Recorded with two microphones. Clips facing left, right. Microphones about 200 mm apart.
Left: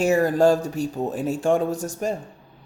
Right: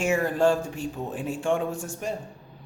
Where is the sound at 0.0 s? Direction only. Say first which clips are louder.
Left 5 dB; 35° left (ahead or behind).